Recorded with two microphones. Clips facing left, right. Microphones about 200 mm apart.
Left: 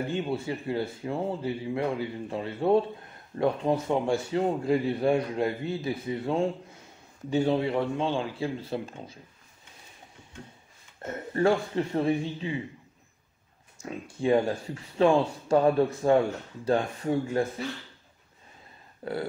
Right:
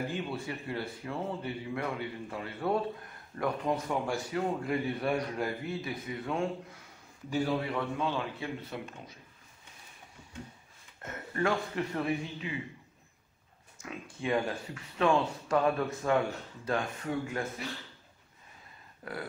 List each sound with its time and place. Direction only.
0.1 s a man's voice: 25° left (ahead or behind)
11.0 s speech: 30° left (ahead or behind)
14.2 s speech: 30° left (ahead or behind)
19.0 s a sound: 30° left (ahead or behind)